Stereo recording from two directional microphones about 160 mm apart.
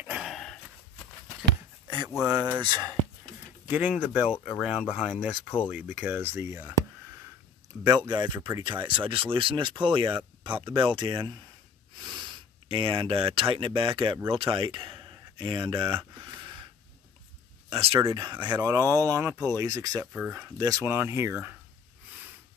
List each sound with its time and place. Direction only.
0.0 s a sound: 5° right (ahead or behind)
2.6 s speech: 30° right (ahead or behind)
3.6 s speech: 10° right (ahead or behind)
7.8 s speech: 25° right (ahead or behind)
14.4 s a sound: 30° right (ahead or behind)
17.6 s speech: 35° right (ahead or behind)
18.0 s speech: 25° right (ahead or behind)
20.0 s speech: 10° right (ahead or behind)